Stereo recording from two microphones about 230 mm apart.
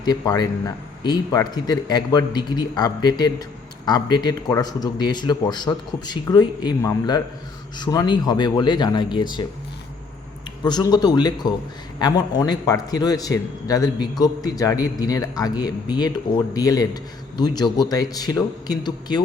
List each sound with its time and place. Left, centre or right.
0.0 s a man's voice: centre
10.6 s a man's voice: centre